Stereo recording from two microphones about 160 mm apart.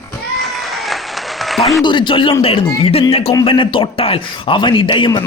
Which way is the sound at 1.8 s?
30° left (ahead or behind).